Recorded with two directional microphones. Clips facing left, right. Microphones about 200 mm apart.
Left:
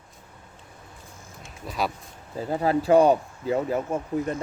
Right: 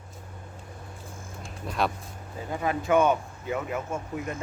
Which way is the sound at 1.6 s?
Centre (ahead or behind).